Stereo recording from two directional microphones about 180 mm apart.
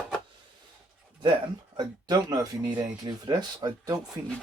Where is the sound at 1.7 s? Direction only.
25° right (ahead or behind).